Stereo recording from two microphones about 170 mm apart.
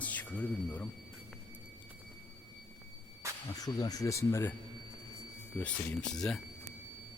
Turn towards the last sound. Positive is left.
turn(degrees=0)  # may be behind; listen again after turning